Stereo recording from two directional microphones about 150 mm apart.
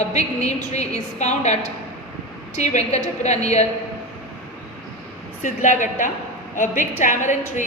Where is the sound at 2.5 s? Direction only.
50° left (ahead or behind).